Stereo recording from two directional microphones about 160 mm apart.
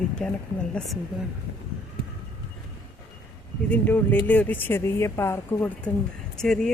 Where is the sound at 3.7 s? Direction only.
10° left (ahead or behind).